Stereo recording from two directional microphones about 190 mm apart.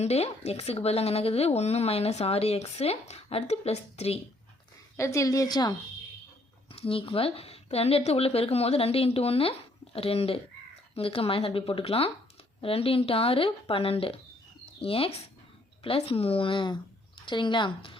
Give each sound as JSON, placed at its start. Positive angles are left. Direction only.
{"t": 0.0, "sound": "a woman's voice", "side_deg": 35}
{"t": 4.9, "sound": "a woman's voice", "side_deg": 15}